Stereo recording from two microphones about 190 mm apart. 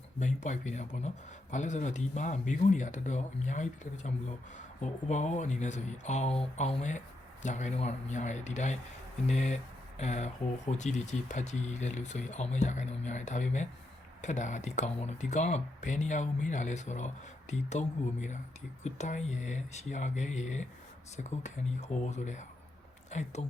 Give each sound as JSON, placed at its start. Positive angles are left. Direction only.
{"t": 0.2, "sound": "speech", "side_deg": 40}